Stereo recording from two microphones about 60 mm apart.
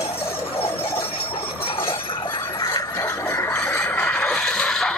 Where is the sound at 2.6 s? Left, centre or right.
Left.